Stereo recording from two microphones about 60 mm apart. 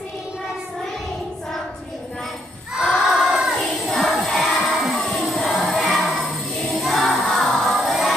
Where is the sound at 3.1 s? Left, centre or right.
Centre.